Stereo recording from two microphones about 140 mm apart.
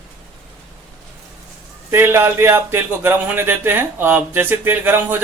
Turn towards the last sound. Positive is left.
turn(degrees=-15)  # may be behind; listen again after turning